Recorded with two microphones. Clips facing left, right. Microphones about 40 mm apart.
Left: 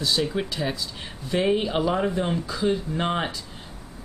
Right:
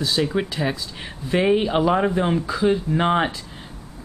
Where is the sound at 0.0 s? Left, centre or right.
Centre.